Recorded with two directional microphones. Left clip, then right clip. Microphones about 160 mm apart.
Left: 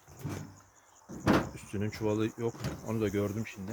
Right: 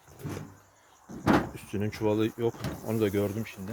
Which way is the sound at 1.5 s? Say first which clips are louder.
Right 4 dB; 25° right (ahead or behind).